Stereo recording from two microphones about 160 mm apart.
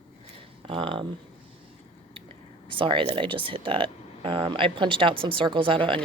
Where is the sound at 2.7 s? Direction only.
30° right (ahead or behind).